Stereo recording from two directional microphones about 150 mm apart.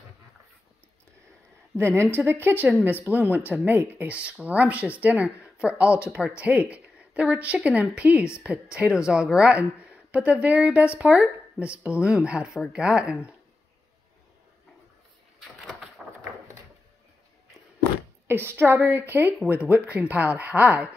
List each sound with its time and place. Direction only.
1.8 s speech: 15° right (ahead or behind)
16.0 s a sound: centre (ahead or behind)
18.2 s speech: 15° right (ahead or behind)